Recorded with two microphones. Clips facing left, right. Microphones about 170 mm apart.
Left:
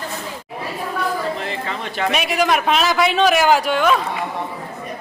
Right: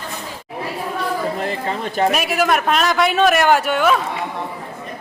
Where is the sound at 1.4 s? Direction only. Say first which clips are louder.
Right 3 dB; 40° right (ahead or behind).